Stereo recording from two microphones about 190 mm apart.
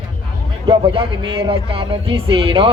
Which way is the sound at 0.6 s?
25° right (ahead or behind).